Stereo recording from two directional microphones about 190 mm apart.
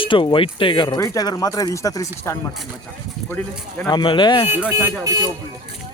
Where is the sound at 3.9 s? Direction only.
25° left (ahead or behind).